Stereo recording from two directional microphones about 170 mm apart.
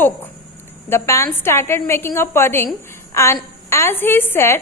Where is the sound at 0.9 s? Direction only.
15° left (ahead or behind).